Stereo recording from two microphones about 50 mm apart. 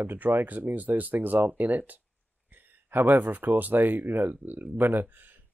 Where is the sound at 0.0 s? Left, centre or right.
Right.